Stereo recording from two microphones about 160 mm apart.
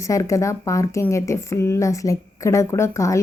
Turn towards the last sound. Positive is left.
turn(degrees=20)  # may be behind; listen again after turning